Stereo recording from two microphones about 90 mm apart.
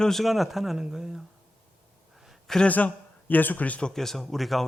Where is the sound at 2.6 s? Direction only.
15° left (ahead or behind).